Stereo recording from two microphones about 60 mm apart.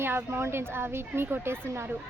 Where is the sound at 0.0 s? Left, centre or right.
Right.